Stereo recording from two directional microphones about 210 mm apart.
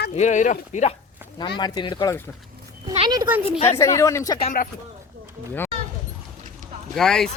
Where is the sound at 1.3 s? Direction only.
20° left (ahead or behind).